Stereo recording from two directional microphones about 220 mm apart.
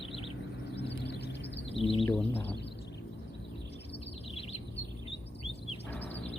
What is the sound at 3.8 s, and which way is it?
Bird vocalization, 25° left (ahead or behind).